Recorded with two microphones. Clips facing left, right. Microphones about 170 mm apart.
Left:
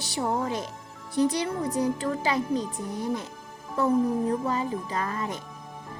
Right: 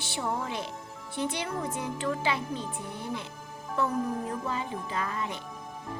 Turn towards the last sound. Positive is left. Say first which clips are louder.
# left 3 dB
turn(degrees=45)  # may be behind; listen again after turning